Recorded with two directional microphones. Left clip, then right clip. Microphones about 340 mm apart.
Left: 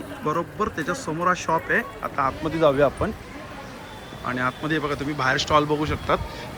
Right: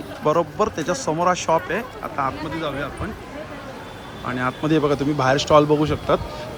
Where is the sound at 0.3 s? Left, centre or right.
Centre.